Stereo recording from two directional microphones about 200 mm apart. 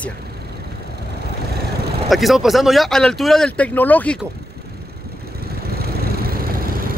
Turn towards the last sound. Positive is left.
turn(degrees=-45)  # may be behind; listen again after turning